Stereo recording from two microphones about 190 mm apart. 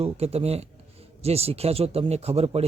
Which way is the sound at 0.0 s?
35° right (ahead or behind).